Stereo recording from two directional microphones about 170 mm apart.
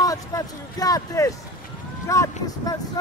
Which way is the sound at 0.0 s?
20° left (ahead or behind).